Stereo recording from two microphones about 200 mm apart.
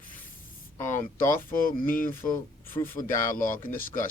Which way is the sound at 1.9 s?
45° left (ahead or behind).